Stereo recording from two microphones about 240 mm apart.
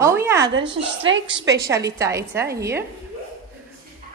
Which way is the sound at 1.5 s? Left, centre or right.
Centre.